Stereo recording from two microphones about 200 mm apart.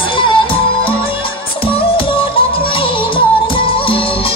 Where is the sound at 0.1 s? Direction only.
25° left (ahead or behind).